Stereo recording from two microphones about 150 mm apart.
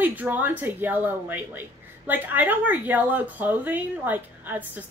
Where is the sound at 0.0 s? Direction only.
10° right (ahead or behind).